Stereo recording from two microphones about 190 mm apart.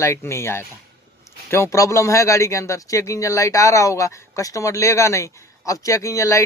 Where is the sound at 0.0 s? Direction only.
15° left (ahead or behind).